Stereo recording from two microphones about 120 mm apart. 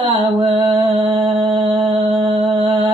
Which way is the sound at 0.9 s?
40° right (ahead or behind).